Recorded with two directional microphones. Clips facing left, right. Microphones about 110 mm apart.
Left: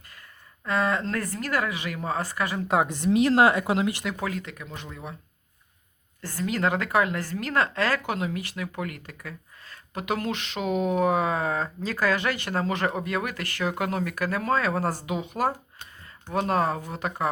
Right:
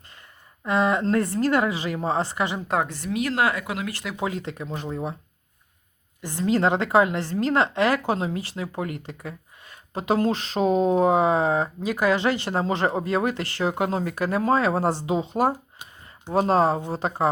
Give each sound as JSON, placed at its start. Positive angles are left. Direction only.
{"t": 0.1, "sound": "a sound", "side_deg": -20}
{"t": 1.0, "sound": "speech", "side_deg": -30}
{"t": 2.8, "sound": "speech", "side_deg": 20}
{"t": 3.1, "sound": "speech", "side_deg": 30}
{"t": 4.2, "sound": "speech", "side_deg": -25}
{"t": 6.2, "sound": "speech", "side_deg": -25}
{"t": 8.0, "sound": "speech", "side_deg": -30}